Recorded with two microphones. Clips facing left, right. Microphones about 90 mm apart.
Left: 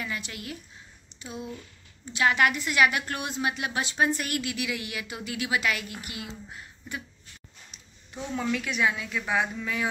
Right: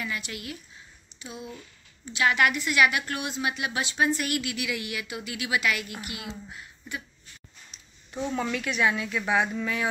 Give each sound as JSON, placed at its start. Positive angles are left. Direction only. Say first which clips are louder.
{"t": 0.0, "sound": "a woman's voice", "louder": "right 1 dB", "side_deg": 35}
{"t": 2.1, "sound": "a woman's voice", "louder": "even", "side_deg": 35}
{"t": 8.1, "sound": "a woman's voice", "louder": "right 1 dB", "side_deg": 0}